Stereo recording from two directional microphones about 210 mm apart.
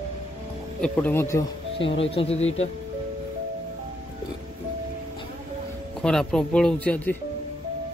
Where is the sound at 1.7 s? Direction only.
25° left (ahead or behind).